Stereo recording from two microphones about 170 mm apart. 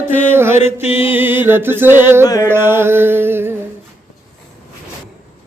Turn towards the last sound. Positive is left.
turn(degrees=-15)  # may be behind; listen again after turning